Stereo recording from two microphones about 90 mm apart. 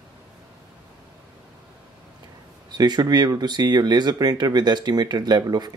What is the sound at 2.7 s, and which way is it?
Speech, 50° right (ahead or behind).